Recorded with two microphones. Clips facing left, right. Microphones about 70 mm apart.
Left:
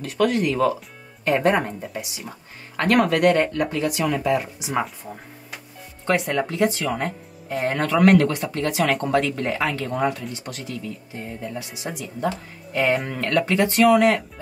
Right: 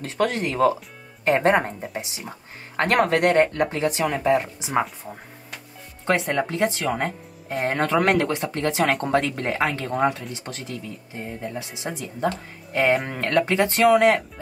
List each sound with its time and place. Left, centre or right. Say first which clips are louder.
0.0 s speech: left 3 dB; right
6.0 s speech: even; right
11.9 s speech: right 1 dB; centre